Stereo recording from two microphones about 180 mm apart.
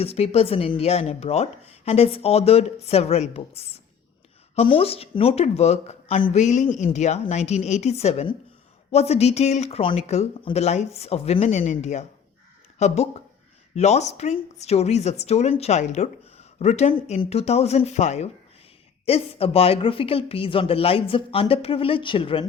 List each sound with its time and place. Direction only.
0.0 s speech: 35° left (ahead or behind)